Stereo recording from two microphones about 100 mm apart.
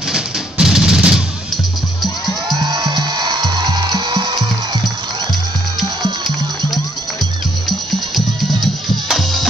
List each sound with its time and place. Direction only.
0.1 s music: 5° right (ahead or behind)
2.6 s music: 45° right (ahead or behind)
9.1 s music: 5° left (ahead or behind)